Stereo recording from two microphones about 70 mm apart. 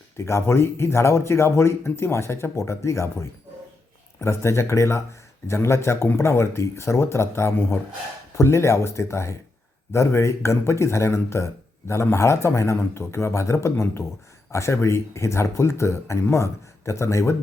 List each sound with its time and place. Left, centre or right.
0.3 s speech: left